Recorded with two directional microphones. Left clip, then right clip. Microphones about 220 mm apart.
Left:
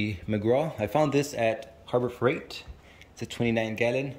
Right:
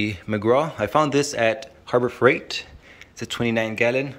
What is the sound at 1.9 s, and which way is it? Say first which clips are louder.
Speech: right 8 dB; 30° right (ahead or behind).